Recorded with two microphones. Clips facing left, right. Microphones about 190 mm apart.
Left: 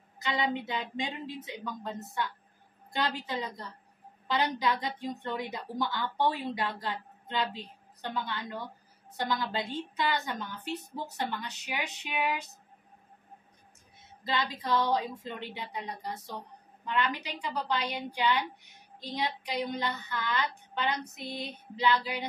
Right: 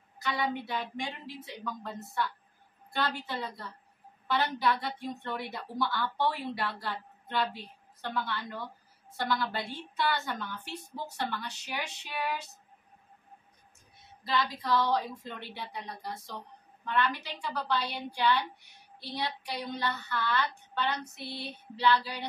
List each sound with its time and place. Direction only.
0.2 s a woman's voice: 20° left (ahead or behind)
14.2 s a woman's voice: 20° left (ahead or behind)